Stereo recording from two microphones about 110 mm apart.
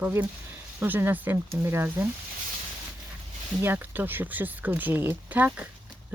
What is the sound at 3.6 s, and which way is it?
Speech, 20° right (ahead or behind).